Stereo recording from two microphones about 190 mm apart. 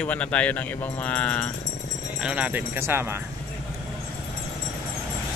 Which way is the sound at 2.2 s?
5° right (ahead or behind).